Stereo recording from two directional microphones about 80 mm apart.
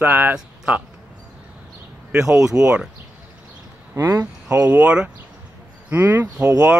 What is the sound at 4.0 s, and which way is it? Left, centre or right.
Speech, right.